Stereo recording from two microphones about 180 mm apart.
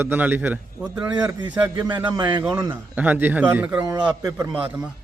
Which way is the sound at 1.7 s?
25° right (ahead or behind).